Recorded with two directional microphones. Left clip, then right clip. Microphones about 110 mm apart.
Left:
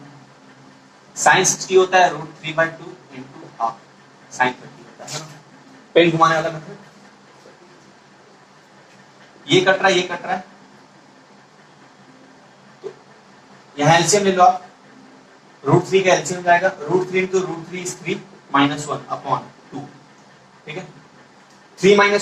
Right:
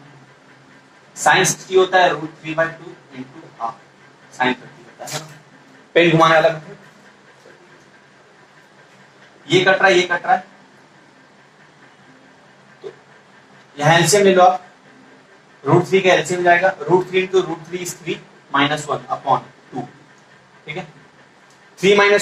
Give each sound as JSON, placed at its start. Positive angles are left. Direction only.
{"t": 1.1, "sound": "a man's voice", "side_deg": -25}
{"t": 4.9, "sound": "a man's voice", "side_deg": -30}
{"t": 9.5, "sound": "a man's voice", "side_deg": -25}
{"t": 13.7, "sound": "a man's voice", "side_deg": -30}
{"t": 15.6, "sound": "a man's voice", "side_deg": -25}
{"t": 21.8, "sound": "a man's voice", "side_deg": -30}